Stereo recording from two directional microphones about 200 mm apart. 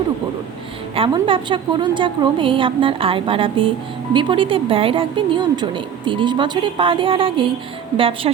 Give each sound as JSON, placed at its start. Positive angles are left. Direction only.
{"t": 0.9, "sound": "a woman's voice", "side_deg": -25}